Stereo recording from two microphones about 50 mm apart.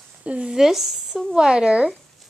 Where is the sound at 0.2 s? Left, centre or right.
Right.